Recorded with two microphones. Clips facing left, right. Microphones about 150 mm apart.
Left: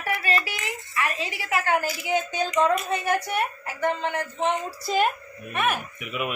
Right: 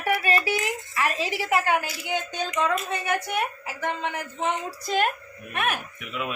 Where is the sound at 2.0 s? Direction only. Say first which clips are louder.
Left 4 dB; 5° left (ahead or behind).